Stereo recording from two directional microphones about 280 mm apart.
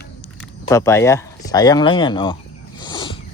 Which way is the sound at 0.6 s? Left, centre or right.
Centre.